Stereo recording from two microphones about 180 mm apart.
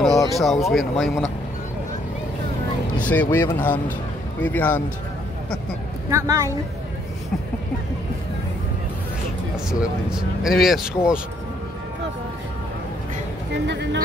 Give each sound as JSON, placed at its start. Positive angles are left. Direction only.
{"t": 0.3, "sound": "speech", "side_deg": 0}
{"t": 3.0, "sound": "a man's voice", "side_deg": 10}
{"t": 6.0, "sound": "speech", "side_deg": -15}
{"t": 9.7, "sound": "speech", "side_deg": -5}
{"t": 13.7, "sound": "speech", "side_deg": -70}